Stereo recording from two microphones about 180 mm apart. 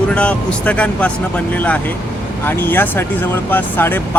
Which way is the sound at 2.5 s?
10° left (ahead or behind).